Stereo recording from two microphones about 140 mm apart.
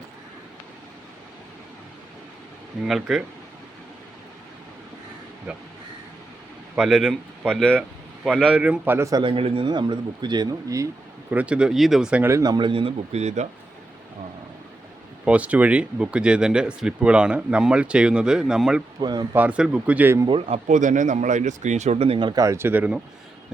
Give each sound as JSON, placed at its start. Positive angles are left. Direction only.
{"t": 2.8, "sound": "speech", "side_deg": -5}
{"t": 5.5, "sound": "speech", "side_deg": -10}
{"t": 6.7, "sound": "speech", "side_deg": 0}
{"t": 7.8, "sound": "speech", "side_deg": -5}
{"t": 9.2, "sound": "a man's voice", "side_deg": -40}
{"t": 11.3, "sound": "speech", "side_deg": -10}
{"t": 12.3, "sound": "a man's voice", "side_deg": -25}
{"t": 15.2, "sound": "speech", "side_deg": -10}
{"t": 18.9, "sound": "a man's voice", "side_deg": -30}
{"t": 19.3, "sound": "speech", "side_deg": -10}
{"t": 20.2, "sound": "a man's voice", "side_deg": -40}
{"t": 20.7, "sound": "speech", "side_deg": -65}